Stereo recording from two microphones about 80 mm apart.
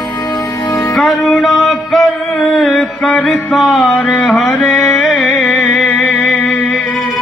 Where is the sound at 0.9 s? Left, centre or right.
Centre.